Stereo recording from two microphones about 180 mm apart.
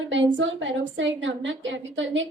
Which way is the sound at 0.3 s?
90° right.